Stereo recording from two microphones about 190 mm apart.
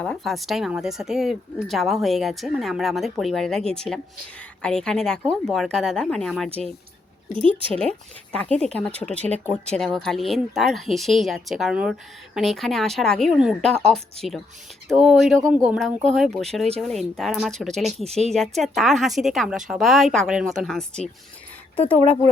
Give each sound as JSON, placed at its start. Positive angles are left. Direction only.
{"t": 0.0, "sound": "speech", "side_deg": 5}
{"t": 7.7, "sound": "speech", "side_deg": 5}
{"t": 9.1, "sound": "speech", "side_deg": -35}
{"t": 9.7, "sound": "speech", "side_deg": 5}